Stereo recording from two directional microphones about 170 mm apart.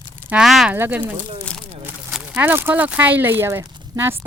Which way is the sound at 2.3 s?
15° right (ahead or behind).